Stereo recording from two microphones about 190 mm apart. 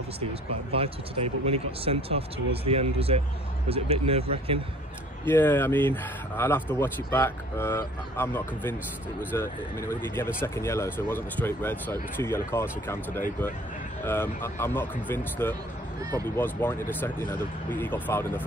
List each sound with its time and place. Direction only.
0.2 s speech: 30° right (ahead or behind)
5.2 s speech: 10° left (ahead or behind)
16.0 s speech: 20° right (ahead or behind)
16.3 s speech: 10° left (ahead or behind)